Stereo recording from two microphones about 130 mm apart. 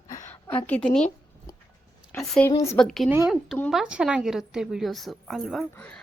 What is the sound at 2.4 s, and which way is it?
Speech, 15° left (ahead or behind).